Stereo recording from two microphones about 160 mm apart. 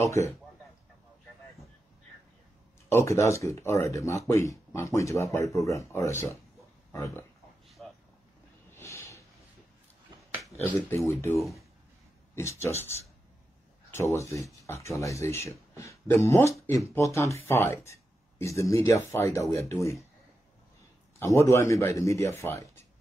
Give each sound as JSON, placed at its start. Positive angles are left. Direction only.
{"t": 0.2, "sound": "speech", "side_deg": 20}
{"t": 2.9, "sound": "speech", "side_deg": 15}
{"t": 7.8, "sound": "vehicle", "side_deg": 0}
{"t": 8.7, "sound": "a sound", "side_deg": 15}
{"t": 11.1, "sound": "speech", "side_deg": 20}
{"t": 13.9, "sound": "speech", "side_deg": 20}
{"t": 21.2, "sound": "speech", "side_deg": 15}